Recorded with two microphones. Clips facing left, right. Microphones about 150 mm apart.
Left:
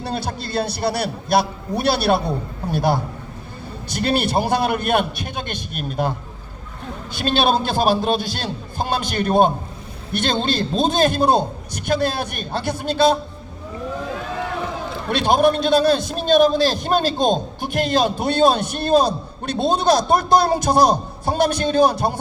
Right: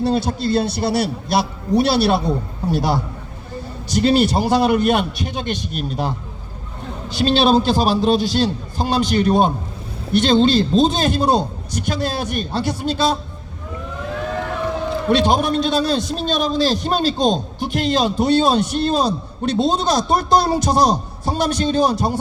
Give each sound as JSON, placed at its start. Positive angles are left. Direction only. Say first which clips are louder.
{"t": 0.0, "sound": "a man's voice", "louder": "right 7 dB", "side_deg": 55}
{"t": 15.1, "sound": "a man's voice", "louder": "left 1 dB", "side_deg": 55}